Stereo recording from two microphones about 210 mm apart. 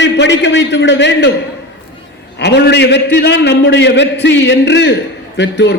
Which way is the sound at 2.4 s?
55° left (ahead or behind).